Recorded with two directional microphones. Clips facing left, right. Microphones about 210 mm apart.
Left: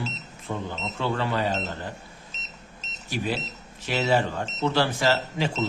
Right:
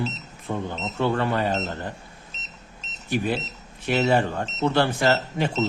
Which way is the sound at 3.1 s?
55° right (ahead or behind).